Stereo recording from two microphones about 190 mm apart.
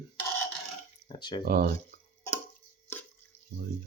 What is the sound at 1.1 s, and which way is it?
Speech, 25° left (ahead or behind).